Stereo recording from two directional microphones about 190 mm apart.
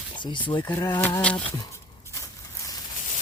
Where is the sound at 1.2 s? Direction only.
5° left (ahead or behind).